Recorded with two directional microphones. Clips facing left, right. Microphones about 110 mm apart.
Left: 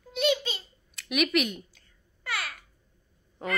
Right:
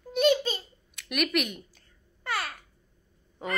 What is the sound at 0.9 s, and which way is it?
Speech, centre (ahead or behind).